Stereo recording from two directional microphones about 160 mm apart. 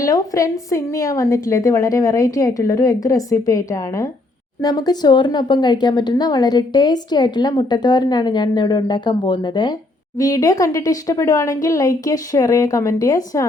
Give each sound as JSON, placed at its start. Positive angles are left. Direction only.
{"t": 0.0, "sound": "a woman's voice", "side_deg": 20}